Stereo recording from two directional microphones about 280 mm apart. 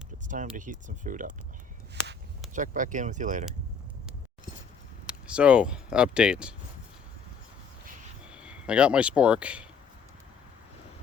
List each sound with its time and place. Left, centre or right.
0.3 s speech: right
2.5 s speech: right
5.2 s speech: centre
8.3 s speech: centre